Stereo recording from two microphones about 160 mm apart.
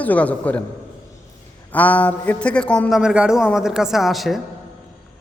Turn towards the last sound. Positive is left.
turn(degrees=0)  # may be behind; listen again after turning